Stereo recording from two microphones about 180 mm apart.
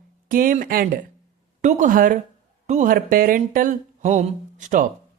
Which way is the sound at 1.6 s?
40° right (ahead or behind).